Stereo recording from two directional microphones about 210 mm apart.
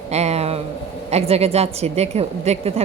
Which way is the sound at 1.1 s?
30° right (ahead or behind).